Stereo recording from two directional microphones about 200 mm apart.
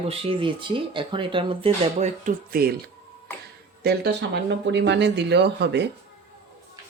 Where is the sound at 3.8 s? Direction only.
60° right (ahead or behind).